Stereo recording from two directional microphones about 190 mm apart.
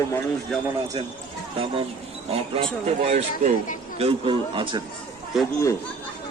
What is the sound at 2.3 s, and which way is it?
A man's voice, 30° right (ahead or behind).